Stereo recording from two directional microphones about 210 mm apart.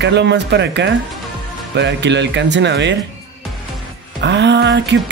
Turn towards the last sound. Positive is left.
turn(degrees=-55)  # may be behind; listen again after turning